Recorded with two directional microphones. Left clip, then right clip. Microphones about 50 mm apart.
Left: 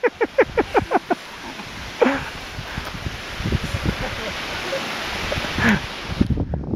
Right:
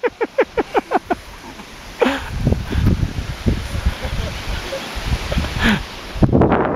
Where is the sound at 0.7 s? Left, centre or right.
Right.